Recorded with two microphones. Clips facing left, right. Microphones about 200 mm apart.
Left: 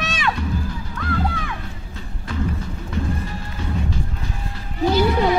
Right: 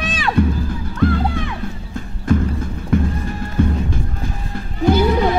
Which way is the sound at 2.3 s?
50° right (ahead or behind).